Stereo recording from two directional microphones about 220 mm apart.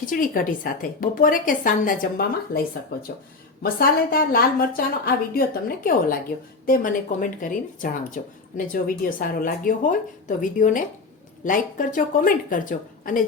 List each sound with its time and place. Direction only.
0.0 s speech: 40° left (ahead or behind)